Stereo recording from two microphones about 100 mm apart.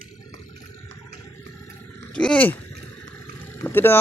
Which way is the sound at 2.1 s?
10° left (ahead or behind).